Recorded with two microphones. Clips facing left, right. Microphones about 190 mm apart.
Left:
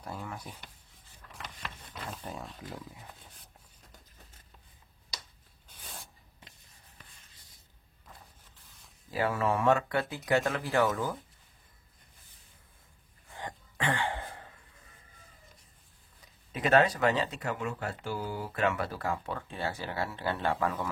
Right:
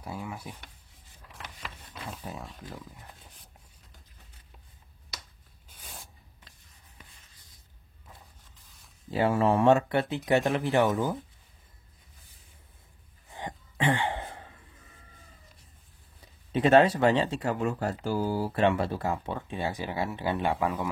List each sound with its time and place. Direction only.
0.0 s speech: 10° right (ahead or behind)
1.6 s a sound: centre (ahead or behind)
5.8 s a sound: centre (ahead or behind)
9.1 s speech: 25° right (ahead or behind)
13.3 s throat clearing: 20° right (ahead or behind)
16.5 s speech: 30° right (ahead or behind)